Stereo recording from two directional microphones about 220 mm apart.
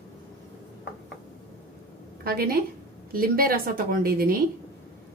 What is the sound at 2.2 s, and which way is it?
A woman's voice, 45° right (ahead or behind).